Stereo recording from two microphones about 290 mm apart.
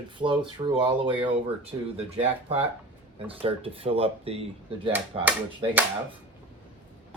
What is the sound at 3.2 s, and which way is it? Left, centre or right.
Speech, centre.